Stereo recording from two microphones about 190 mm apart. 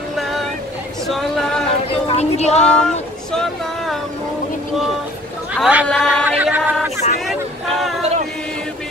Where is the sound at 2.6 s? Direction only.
5° left (ahead or behind).